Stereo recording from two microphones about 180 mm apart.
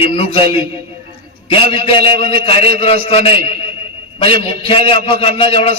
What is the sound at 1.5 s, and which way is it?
A man's voice, 30° left (ahead or behind).